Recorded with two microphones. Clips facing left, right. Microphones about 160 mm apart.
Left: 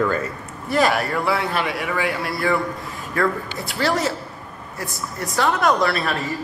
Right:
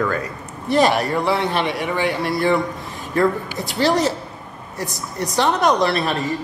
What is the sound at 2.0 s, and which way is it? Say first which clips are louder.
Speech: right 6 dB; centre (ahead or behind).